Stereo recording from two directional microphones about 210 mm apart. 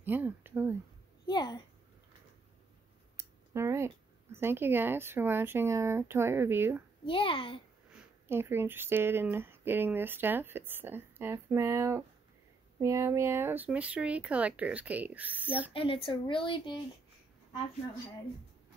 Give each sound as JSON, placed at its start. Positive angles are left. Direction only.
{"t": 0.0, "sound": "speech", "side_deg": -10}
{"t": 1.2, "sound": "a child's voice", "side_deg": 20}
{"t": 3.2, "sound": "speech", "side_deg": -15}
{"t": 7.1, "sound": "speech", "side_deg": 25}
{"t": 7.9, "sound": "speech", "side_deg": -10}
{"t": 15.7, "sound": "speech", "side_deg": 25}